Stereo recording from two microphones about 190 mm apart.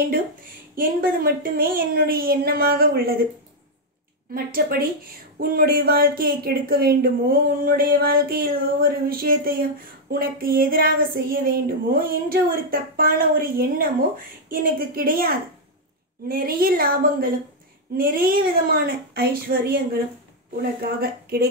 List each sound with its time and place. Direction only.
0.7 s speech: 50° right (ahead or behind)
4.3 s speech: 50° right (ahead or behind)
21.0 s speech: 55° right (ahead or behind)